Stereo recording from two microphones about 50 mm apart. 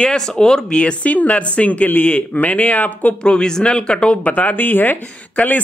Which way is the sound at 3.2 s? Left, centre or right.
Centre.